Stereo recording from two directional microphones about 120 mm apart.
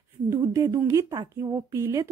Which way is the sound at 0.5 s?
25° right (ahead or behind).